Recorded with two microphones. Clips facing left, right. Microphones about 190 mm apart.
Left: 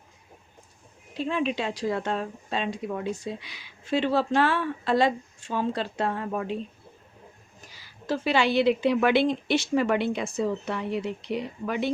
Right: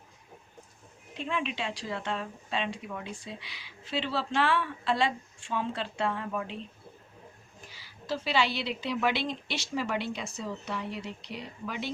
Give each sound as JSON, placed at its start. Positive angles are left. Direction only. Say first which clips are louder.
{"t": 1.1, "sound": "speech", "louder": "left 6 dB", "side_deg": 35}
{"t": 7.6, "sound": "a woman's voice", "louder": "left 1 dB", "side_deg": 45}